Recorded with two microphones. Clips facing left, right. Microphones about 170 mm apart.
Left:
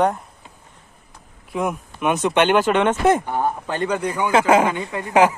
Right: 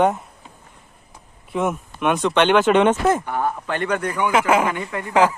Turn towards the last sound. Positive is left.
turn(degrees=20)  # may be behind; listen again after turning